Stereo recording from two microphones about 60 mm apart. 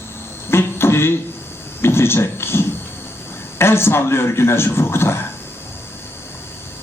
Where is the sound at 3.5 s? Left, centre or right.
Left.